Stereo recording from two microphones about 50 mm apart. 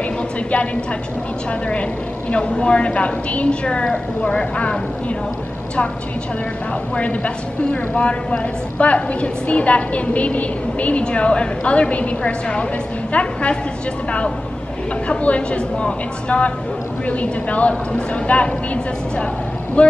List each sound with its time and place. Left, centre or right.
2.3 s a woman's voice: left
7.0 s a woman's voice: left
15.0 s a woman's voice: left
19.8 s a woman's voice: left